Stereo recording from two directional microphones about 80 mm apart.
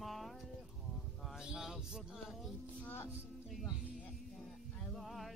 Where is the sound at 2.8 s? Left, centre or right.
Left.